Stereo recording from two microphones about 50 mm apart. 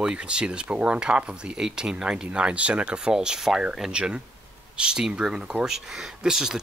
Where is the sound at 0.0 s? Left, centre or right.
Centre.